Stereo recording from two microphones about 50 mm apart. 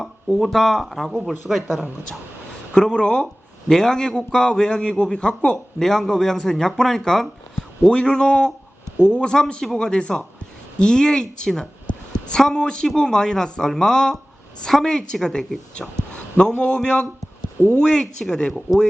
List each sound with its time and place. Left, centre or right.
0.0 s speech: centre
2.7 s a man's voice: centre
16.1 s a man's voice: left